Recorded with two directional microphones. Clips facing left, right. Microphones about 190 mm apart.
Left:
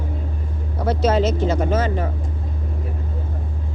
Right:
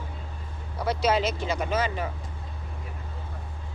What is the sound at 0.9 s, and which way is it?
Speech, 10° right (ahead or behind).